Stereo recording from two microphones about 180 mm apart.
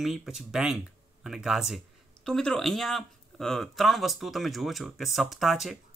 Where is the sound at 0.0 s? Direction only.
Centre (ahead or behind).